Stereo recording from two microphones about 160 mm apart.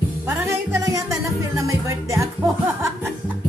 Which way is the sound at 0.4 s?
15° right (ahead or behind).